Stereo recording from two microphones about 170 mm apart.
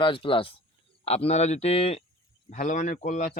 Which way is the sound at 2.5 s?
45° left (ahead or behind).